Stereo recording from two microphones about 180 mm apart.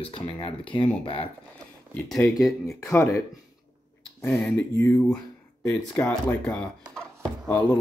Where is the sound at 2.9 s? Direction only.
15° left (ahead or behind).